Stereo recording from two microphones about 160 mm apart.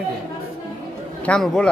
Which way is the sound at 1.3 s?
5° left (ahead or behind).